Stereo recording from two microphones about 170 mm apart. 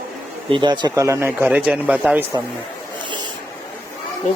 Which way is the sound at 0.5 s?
25° right (ahead or behind).